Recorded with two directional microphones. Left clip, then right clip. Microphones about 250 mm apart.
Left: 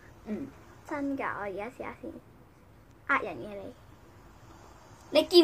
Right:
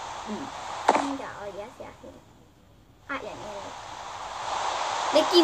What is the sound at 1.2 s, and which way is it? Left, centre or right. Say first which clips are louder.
Speech: left 2 dB; left.